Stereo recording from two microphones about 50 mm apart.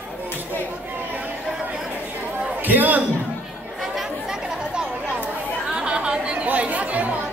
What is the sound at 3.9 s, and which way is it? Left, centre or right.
Chatter, centre.